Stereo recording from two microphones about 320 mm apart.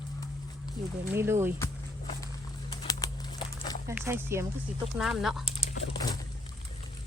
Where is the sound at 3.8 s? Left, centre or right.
Centre.